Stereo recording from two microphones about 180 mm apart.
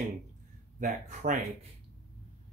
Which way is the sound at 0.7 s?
45° right (ahead or behind).